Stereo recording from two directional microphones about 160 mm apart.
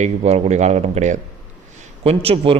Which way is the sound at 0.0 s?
40° right (ahead or behind).